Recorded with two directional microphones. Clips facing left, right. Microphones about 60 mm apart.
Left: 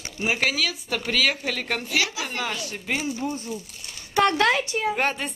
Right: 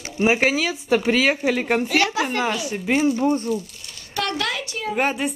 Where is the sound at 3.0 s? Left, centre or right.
Right.